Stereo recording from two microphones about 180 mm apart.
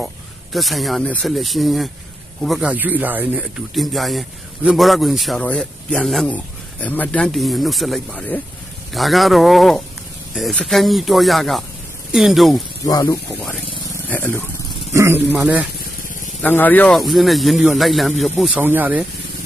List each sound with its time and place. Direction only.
0.5 s speech: centre (ahead or behind)
12.8 s speech: 20° left (ahead or behind)
13.9 s vehicle: 10° left (ahead or behind)
14.9 s speech: 15° right (ahead or behind)
15.8 s vehicle: 50° left (ahead or behind)
16.4 s speech: 10° left (ahead or behind); by 19.0 s 10° right (ahead or behind)